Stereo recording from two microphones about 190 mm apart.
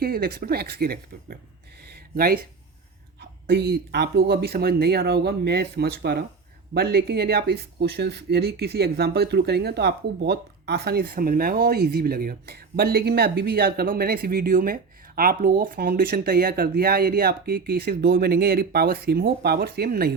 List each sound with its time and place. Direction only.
0.0 s speech: 50° right (ahead or behind)
1.8 s a sound: 55° right (ahead or behind)
3.2 s speech: 60° right (ahead or behind)